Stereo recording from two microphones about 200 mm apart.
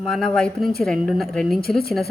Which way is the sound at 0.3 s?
5° left (ahead or behind).